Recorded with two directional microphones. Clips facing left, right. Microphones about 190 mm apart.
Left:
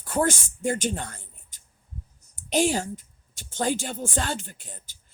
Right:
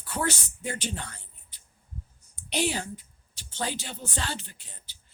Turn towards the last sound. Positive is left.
turn(degrees=50)  # may be behind; listen again after turning